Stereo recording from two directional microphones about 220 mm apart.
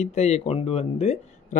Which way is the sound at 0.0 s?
30° left (ahead or behind).